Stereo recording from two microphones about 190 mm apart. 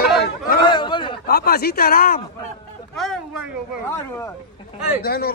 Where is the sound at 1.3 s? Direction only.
55° left (ahead or behind).